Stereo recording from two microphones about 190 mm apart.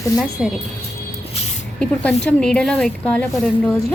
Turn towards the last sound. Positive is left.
turn(degrees=10)  # may be behind; listen again after turning